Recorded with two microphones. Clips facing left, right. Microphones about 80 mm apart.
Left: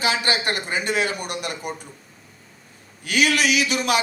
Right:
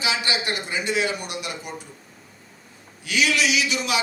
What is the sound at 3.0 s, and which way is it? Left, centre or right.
A man's voice, left.